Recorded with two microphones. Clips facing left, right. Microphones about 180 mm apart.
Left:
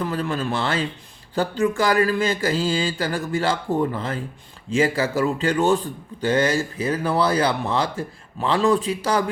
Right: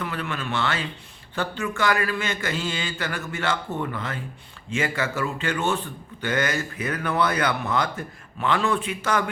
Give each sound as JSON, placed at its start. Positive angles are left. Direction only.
{"t": 0.0, "sound": "speech", "side_deg": 35}